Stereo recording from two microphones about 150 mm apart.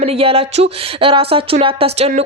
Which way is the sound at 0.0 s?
40° right (ahead or behind).